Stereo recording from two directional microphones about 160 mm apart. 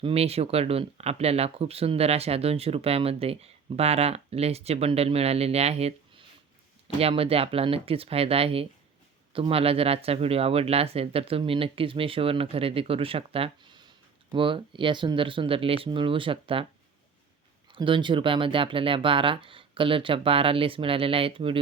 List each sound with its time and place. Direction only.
0.0 s speech: 40° right (ahead or behind)
17.7 s speech: 30° right (ahead or behind)